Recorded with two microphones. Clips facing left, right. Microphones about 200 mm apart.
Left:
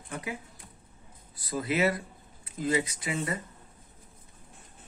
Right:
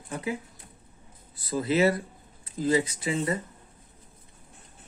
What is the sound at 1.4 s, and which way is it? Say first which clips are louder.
A man's voice: right 4 dB; 30° right (ahead or behind).